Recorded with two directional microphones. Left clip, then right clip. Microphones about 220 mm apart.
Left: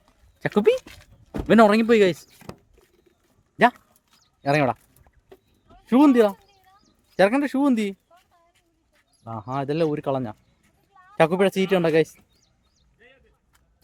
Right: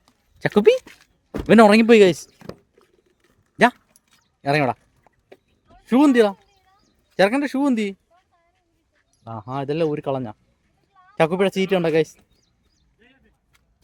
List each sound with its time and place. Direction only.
0.3 s speech: 20° right (ahead or behind)
0.9 s a sound: 15° right (ahead or behind)
1.4 s speech: 25° right (ahead or behind)
4.4 s a sound: 10° right (ahead or behind)
7.2 s speech: 10° right (ahead or behind)
9.2 s speech: 5° right (ahead or behind)